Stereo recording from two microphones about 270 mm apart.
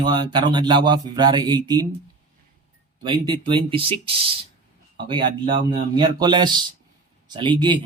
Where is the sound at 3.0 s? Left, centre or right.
Centre.